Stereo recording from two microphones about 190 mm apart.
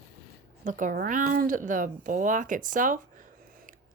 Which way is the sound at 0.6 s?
45° right (ahead or behind).